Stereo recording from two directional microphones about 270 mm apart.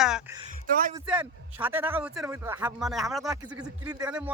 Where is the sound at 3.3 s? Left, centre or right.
Centre.